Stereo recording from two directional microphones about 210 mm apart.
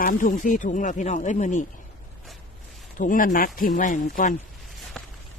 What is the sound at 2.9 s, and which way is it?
Speech, 40° left (ahead or behind).